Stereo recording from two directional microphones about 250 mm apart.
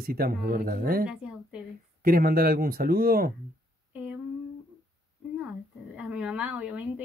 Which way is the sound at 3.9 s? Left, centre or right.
Centre.